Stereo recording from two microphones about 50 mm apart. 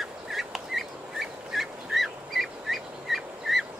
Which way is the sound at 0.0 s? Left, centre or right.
Centre.